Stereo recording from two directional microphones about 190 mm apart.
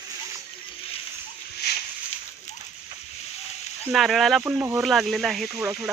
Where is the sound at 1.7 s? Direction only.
60° left (ahead or behind).